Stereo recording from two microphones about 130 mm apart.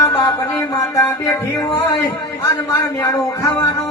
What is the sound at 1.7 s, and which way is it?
Speech, 30° left (ahead or behind).